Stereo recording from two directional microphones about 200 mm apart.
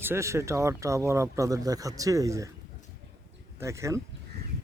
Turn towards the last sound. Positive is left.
turn(degrees=-15)  # may be behind; listen again after turning